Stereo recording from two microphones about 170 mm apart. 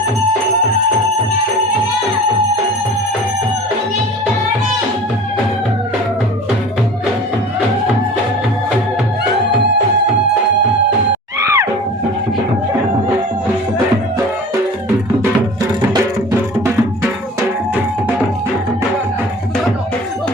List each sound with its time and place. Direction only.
11.3 s music: 20° right (ahead or behind)